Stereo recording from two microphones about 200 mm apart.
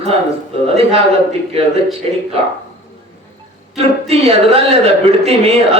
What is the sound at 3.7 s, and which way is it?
A woman's voice, 30° right (ahead or behind).